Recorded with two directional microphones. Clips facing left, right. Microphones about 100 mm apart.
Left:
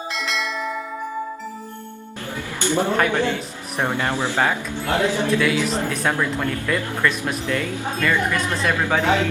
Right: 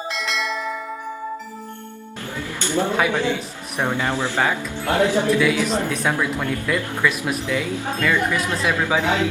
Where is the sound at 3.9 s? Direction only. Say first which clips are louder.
Right 1 dB; 15° left (ahead or behind).